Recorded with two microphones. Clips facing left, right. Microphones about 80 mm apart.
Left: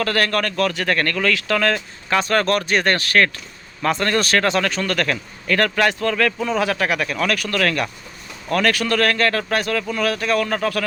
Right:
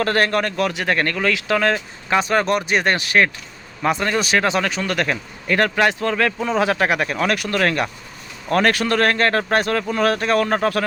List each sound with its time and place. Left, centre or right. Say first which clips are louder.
0.0 s speech: right 2 dB; right